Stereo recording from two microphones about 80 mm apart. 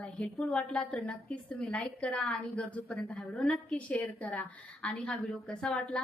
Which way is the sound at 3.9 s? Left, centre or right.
Centre.